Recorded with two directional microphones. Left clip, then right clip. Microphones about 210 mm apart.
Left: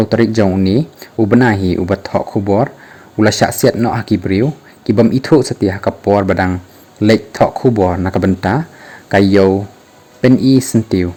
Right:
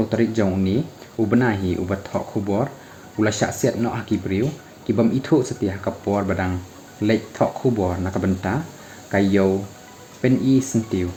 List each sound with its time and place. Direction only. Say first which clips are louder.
0.1 s speech: left 8 dB; 45° left (ahead or behind)